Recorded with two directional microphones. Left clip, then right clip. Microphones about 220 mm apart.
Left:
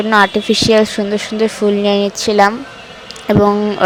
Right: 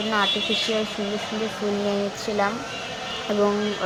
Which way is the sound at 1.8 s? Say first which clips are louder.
Left 11 dB; 45° left (ahead or behind).